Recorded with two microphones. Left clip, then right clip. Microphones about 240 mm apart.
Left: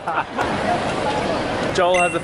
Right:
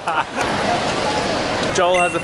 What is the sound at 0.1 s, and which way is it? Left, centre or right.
Speech, centre.